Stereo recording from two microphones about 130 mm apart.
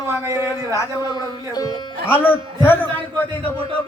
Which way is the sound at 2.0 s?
15° left (ahead or behind).